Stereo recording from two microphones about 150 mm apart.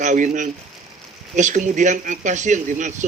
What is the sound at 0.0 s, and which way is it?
A man's voice, 55° right (ahead or behind).